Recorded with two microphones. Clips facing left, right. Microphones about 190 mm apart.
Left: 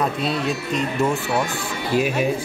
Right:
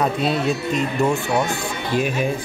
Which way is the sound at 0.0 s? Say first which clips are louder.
Right 2 dB; centre (ahead or behind).